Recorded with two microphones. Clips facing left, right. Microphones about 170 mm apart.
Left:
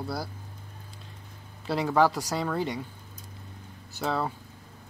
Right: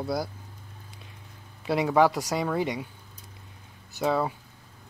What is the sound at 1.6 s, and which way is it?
Speech, 15° right (ahead or behind).